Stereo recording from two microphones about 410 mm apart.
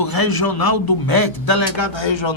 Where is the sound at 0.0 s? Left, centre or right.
Left.